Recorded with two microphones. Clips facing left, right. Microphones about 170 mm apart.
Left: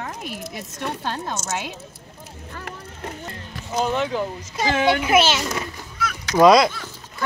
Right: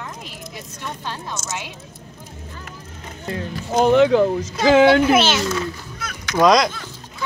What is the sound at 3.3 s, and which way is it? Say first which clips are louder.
Speech: right 8 dB; 70° right (ahead or behind).